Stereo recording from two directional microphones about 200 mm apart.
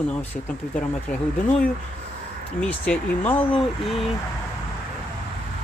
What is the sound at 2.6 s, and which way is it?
Speech, 5° left (ahead or behind).